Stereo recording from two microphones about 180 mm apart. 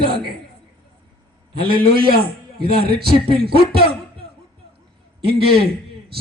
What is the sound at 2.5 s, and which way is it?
Speech, 60° right (ahead or behind).